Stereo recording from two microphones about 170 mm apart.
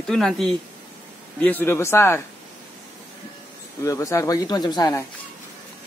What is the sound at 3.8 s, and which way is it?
Speech, 20° left (ahead or behind).